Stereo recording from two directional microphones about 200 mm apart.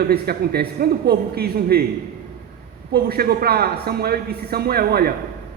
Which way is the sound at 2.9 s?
50° right (ahead or behind).